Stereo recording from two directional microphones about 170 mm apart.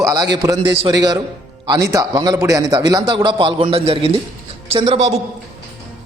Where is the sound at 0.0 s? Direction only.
25° right (ahead or behind).